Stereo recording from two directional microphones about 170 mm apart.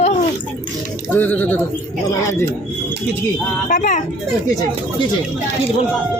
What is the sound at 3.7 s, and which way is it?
Speech, 50° left (ahead or behind).